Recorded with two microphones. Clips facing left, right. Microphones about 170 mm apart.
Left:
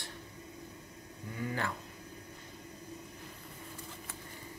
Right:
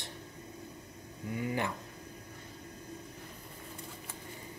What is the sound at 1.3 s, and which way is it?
Speech, 20° right (ahead or behind).